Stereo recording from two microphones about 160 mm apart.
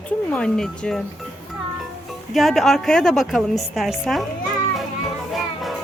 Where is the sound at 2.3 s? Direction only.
Centre (ahead or behind).